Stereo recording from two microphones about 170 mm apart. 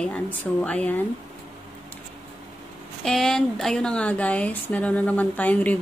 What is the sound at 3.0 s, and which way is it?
A woman's voice, 5° left (ahead or behind).